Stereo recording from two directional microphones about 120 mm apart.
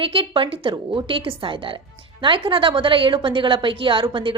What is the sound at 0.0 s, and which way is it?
A woman's voice, 45° right (ahead or behind).